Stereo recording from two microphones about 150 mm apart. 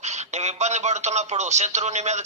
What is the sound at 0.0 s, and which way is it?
Speech, 50° right (ahead or behind).